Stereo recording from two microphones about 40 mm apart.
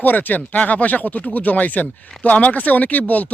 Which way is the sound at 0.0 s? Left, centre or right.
Left.